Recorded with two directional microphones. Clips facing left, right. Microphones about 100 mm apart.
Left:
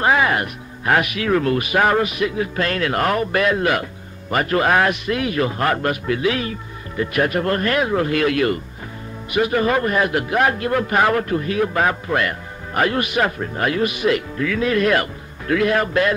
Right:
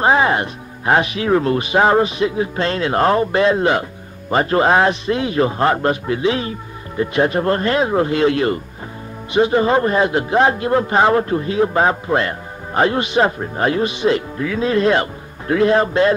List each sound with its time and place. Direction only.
0.0 s a man's voice: 30° right (ahead or behind)